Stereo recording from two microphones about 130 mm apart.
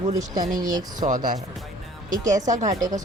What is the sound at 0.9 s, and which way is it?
Speech, 75° right (ahead or behind).